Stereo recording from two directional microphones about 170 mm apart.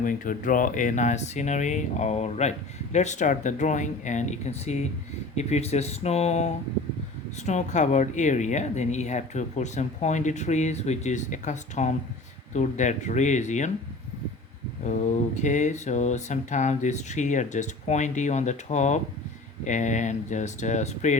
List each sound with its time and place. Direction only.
0.0 s speech: 50° left (ahead or behind)
14.8 s speech: 45° left (ahead or behind)